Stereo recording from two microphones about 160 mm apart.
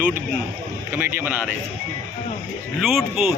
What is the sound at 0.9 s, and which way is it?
Speech, 15° right (ahead or behind).